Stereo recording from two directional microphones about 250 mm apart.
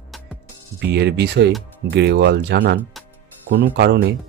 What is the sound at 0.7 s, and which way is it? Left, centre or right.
Speech, right.